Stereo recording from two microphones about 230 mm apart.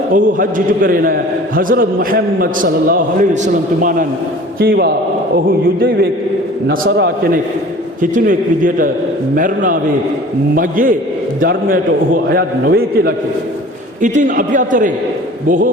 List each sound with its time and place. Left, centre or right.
0.1 s a man's voice: right
8.1 s a man's voice: right